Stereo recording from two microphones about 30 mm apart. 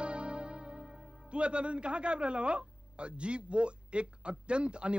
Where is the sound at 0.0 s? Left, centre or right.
Right.